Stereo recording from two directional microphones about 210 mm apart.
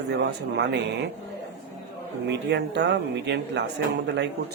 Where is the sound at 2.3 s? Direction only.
55° right (ahead or behind).